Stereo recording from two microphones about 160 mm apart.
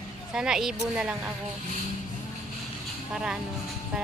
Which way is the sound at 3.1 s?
5° right (ahead or behind).